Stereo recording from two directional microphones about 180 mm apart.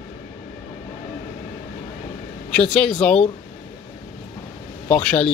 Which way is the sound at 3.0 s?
5° left (ahead or behind).